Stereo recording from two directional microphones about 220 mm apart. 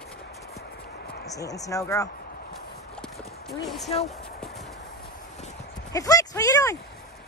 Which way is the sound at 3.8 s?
30° left (ahead or behind).